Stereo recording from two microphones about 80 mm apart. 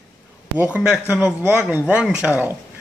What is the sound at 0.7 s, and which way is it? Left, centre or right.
Speech, centre.